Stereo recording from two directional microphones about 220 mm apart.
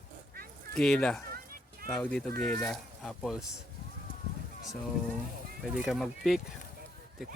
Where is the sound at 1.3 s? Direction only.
40° right (ahead or behind).